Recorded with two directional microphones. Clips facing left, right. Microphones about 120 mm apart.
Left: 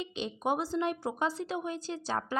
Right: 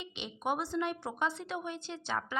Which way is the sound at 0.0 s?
35° left (ahead or behind).